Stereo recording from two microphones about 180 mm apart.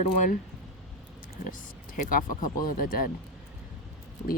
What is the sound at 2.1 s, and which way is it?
Speech, 50° left (ahead or behind).